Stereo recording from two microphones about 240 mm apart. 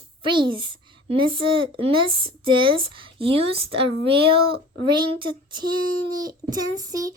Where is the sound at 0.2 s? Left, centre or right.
Centre.